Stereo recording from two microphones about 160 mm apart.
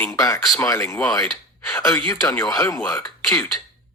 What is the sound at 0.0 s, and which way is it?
Speech, 15° left (ahead or behind).